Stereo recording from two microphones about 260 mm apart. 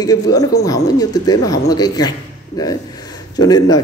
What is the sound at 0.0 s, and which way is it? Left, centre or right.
Speech, centre.